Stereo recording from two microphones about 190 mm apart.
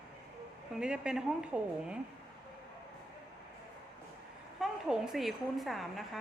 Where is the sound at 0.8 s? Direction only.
5° right (ahead or behind).